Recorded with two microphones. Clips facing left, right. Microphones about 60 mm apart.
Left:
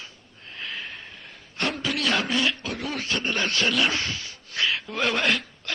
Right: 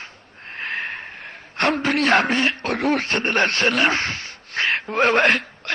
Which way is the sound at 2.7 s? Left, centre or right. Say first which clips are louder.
Right 8 dB; right.